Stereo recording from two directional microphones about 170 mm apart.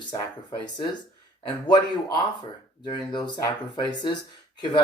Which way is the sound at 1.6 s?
25° left (ahead or behind).